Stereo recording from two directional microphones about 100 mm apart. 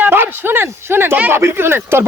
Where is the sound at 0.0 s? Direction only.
20° right (ahead or behind).